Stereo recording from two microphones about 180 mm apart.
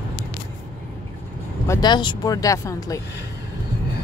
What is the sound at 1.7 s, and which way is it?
Speech, 25° left (ahead or behind).